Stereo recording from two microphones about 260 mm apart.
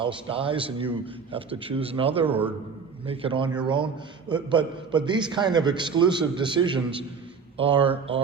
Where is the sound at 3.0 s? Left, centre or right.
Right.